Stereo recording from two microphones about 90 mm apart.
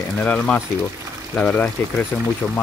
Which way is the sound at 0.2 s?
15° left (ahead or behind).